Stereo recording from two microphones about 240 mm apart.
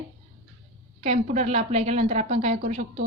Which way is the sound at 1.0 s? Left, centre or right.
Right.